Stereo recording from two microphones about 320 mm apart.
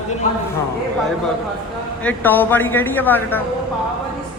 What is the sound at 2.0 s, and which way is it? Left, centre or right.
Speech, centre.